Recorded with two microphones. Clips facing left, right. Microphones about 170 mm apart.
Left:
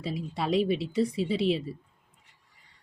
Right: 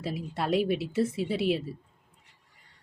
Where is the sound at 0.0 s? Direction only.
Centre (ahead or behind).